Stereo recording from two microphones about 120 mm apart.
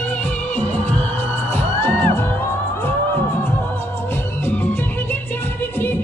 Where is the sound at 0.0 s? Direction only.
10° left (ahead or behind).